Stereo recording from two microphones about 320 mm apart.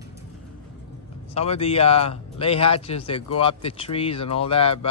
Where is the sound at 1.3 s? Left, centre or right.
Centre.